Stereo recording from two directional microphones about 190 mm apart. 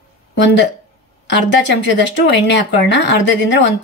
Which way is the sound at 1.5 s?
70° left (ahead or behind).